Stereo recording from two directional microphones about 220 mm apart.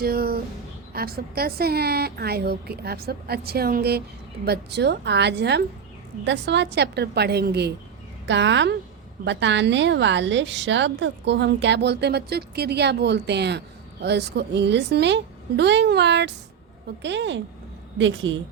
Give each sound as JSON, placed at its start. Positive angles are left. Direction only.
{"t": 0.0, "sound": "a woman's voice", "side_deg": -45}